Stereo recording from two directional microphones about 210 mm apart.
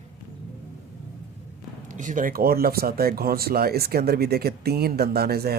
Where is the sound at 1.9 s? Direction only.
35° right (ahead or behind).